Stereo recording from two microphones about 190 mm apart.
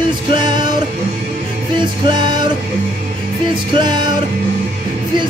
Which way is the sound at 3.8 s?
25° right (ahead or behind).